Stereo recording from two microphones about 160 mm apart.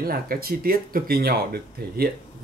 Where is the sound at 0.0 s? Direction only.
70° right (ahead or behind).